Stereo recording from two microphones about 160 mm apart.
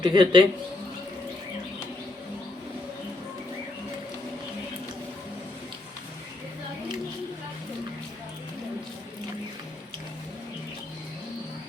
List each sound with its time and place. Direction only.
0.0 s a man's voice: 30° right (ahead or behind)